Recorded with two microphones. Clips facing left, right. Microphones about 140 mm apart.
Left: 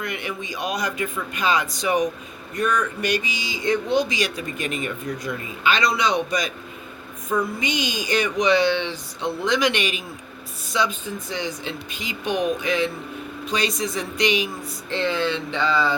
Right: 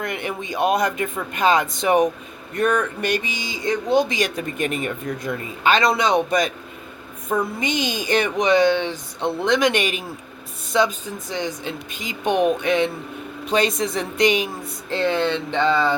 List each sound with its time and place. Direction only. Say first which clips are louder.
0.0 s speech: right 3 dB; 50° right (ahead or behind)